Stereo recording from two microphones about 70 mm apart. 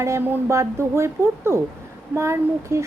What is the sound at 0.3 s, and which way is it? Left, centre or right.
A woman's voice, right.